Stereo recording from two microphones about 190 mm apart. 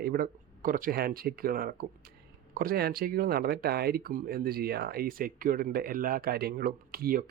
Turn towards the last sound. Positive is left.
turn(degrees=-50)  # may be behind; listen again after turning